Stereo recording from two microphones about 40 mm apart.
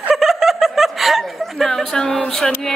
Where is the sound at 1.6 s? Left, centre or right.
Centre.